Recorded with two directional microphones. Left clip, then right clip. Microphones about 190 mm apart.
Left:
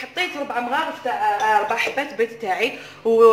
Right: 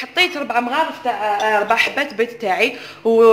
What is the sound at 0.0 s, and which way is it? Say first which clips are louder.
Speech: right 8 dB; 35° right (ahead or behind).